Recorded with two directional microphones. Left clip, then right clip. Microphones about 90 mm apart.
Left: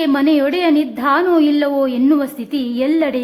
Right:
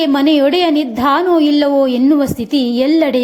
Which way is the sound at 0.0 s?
25° right (ahead or behind).